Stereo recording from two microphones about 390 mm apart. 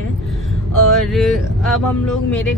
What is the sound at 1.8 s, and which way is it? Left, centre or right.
Speech, left.